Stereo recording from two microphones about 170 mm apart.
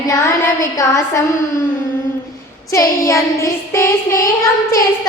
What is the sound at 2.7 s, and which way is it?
A woman's voice, 20° left (ahead or behind).